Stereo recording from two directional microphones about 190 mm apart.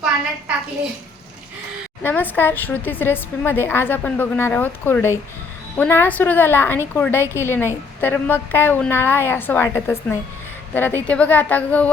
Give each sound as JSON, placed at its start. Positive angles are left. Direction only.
{"t": 2.0, "sound": "a woman's voice", "side_deg": 10}